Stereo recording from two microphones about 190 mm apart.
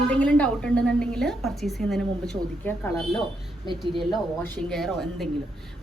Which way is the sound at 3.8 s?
Centre (ahead or behind).